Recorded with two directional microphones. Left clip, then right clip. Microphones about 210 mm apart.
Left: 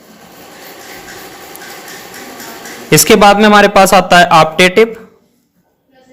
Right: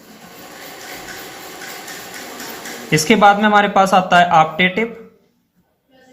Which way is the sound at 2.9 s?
55° left (ahead or behind).